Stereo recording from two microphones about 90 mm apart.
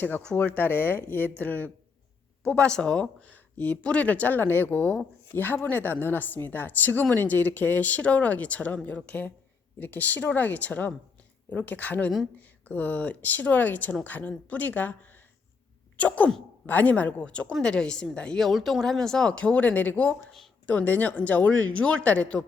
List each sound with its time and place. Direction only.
0.3 s a woman's voice: 20° left (ahead or behind)
2.4 s a woman's voice: 10° left (ahead or behind)
16.0 s a woman's voice: 15° left (ahead or behind)